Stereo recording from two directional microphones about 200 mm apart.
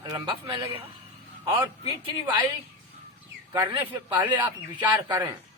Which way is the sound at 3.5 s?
15° right (ahead or behind).